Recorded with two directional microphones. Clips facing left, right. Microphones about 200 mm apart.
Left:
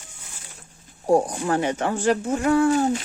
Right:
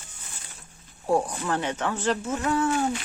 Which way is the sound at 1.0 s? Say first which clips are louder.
Left 5 dB; 35° left (ahead or behind).